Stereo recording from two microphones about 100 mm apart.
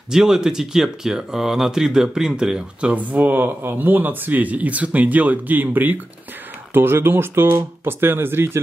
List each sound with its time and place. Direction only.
0.1 s speech: 5° right (ahead or behind); by 8.5 s 25° right (ahead or behind)